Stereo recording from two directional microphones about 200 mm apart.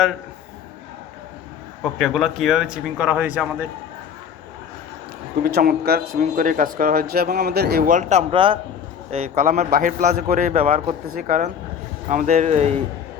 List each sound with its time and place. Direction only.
1.8 s a man's voice: centre (ahead or behind)
5.4 s speech: 50° right (ahead or behind)
8.3 s a man's voice: 25° right (ahead or behind)
9.0 s a man's voice: 35° right (ahead or behind)
10.5 s a man's voice: 30° right (ahead or behind)
11.1 s a man's voice: 45° right (ahead or behind)